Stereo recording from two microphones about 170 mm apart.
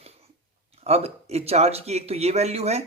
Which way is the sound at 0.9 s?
40° right (ahead or behind).